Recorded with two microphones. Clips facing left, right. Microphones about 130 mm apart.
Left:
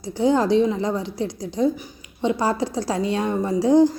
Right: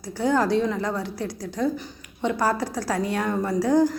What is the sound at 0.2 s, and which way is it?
A woman's voice, 20° left (ahead or behind).